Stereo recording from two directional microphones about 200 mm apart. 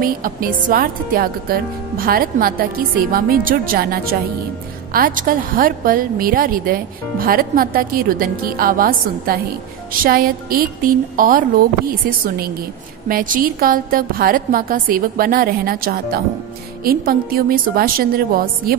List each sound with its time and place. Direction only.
0.0 s speech: 45° right (ahead or behind)